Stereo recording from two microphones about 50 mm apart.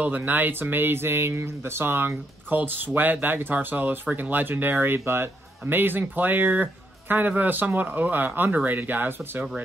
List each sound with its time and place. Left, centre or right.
0.0 s a man's voice: right